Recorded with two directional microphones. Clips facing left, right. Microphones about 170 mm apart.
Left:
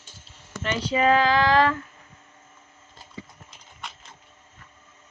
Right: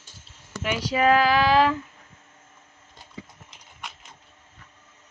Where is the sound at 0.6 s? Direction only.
5° right (ahead or behind).